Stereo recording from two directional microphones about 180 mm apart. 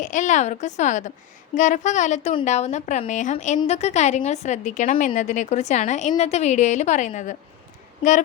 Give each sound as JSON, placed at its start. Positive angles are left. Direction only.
{"t": 0.0, "sound": "a woman's voice", "side_deg": 45}